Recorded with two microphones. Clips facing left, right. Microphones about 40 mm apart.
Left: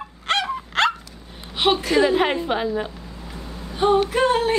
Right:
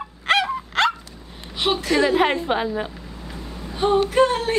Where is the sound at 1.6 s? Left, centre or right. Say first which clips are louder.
Left 3 dB; centre.